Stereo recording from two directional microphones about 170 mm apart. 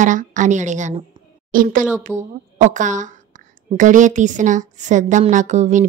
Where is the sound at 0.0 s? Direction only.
50° right (ahead or behind).